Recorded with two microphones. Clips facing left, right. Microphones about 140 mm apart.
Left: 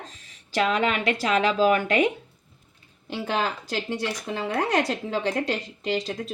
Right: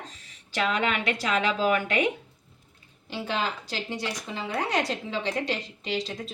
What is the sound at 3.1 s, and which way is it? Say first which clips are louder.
A woman's voice: left 3 dB; 50° left (ahead or behind).